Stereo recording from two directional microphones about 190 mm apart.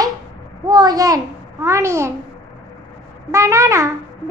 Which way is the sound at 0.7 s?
20° right (ahead or behind).